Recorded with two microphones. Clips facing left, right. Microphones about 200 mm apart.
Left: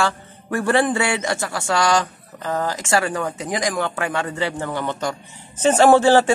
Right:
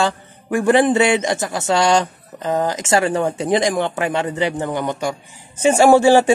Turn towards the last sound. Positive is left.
turn(degrees=-15)  # may be behind; listen again after turning